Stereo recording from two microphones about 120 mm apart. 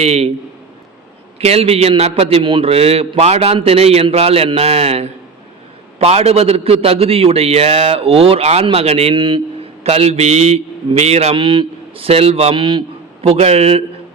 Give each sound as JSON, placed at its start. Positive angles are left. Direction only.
{"t": 0.0, "sound": "a man's voice", "side_deg": -65}
{"t": 1.4, "sound": "a man's voice", "side_deg": -60}
{"t": 2.4, "sound": "a man's voice", "side_deg": -50}
{"t": 9.8, "sound": "a man's voice", "side_deg": -60}
{"t": 11.3, "sound": "speech", "side_deg": -45}
{"t": 13.2, "sound": "a man's voice", "side_deg": -60}